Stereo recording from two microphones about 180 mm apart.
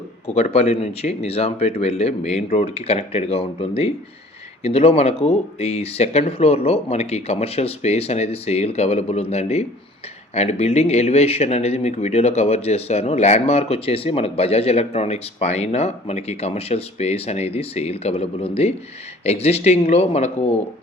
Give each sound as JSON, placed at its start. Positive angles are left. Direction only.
{"t": 0.3, "sound": "speech", "side_deg": 35}